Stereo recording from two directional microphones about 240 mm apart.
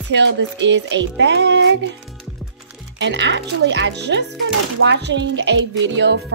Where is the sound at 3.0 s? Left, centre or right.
Right.